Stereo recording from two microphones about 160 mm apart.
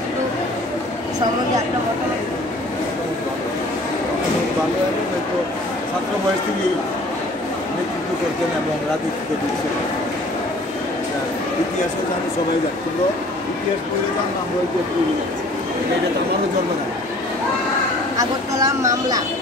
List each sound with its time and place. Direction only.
18.1 s speech: 20° right (ahead or behind)